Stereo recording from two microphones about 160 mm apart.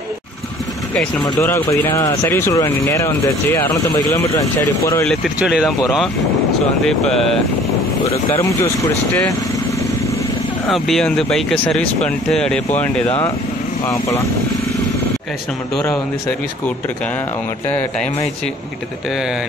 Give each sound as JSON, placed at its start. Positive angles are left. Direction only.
{"t": 0.9, "sound": "speech", "side_deg": 5}
{"t": 1.3, "sound": "speech", "side_deg": 20}
{"t": 5.0, "sound": "speech", "side_deg": 0}
{"t": 10.7, "sound": "speech", "side_deg": 0}
{"t": 13.8, "sound": "speech", "side_deg": 20}
{"t": 17.6, "sound": "speech", "side_deg": 10}
{"t": 19.0, "sound": "speech", "side_deg": -5}